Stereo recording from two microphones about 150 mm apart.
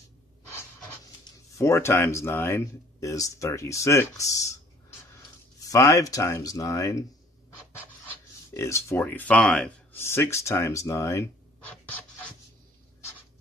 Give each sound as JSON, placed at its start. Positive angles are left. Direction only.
{"t": 1.6, "sound": "speech", "side_deg": 20}
{"t": 5.6, "sound": "speech", "side_deg": 20}
{"t": 8.5, "sound": "speech", "side_deg": 20}
{"t": 9.9, "sound": "speech", "side_deg": 15}
{"t": 11.7, "sound": "scratch", "side_deg": 5}